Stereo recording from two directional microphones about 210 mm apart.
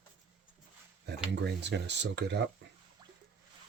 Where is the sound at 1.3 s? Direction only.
55° right (ahead or behind).